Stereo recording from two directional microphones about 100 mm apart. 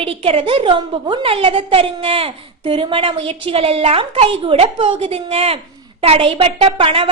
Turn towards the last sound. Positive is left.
turn(degrees=-65)  # may be behind; listen again after turning